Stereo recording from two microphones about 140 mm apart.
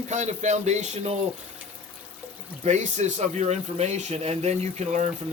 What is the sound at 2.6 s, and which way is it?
Speech, 55° right (ahead or behind).